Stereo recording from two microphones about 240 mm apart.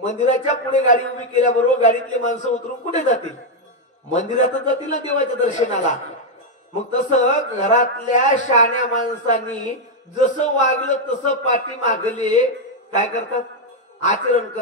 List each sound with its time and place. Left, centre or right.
0.0 s speech: left